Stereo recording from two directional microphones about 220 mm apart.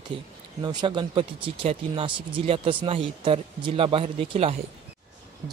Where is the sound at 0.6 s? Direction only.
20° right (ahead or behind).